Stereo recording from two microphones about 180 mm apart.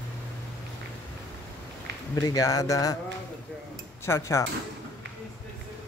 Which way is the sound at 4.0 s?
15° left (ahead or behind).